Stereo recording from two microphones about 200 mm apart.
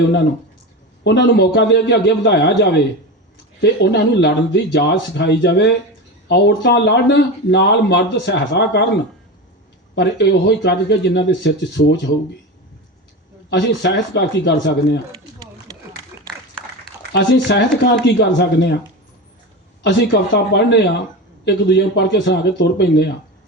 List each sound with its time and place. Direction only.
1.0 s speech: 60° left (ahead or behind)
9.9 s speech: 60° left (ahead or behind)
13.5 s speech: 60° left (ahead or behind)
17.1 s speech: 60° left (ahead or behind)
19.8 s speech: 60° left (ahead or behind)